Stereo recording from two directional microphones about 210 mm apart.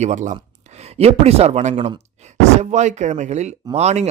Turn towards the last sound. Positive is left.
turn(degrees=-30)  # may be behind; listen again after turning